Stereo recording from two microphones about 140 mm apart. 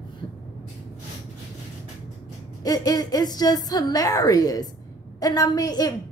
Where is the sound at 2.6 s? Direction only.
25° left (ahead or behind).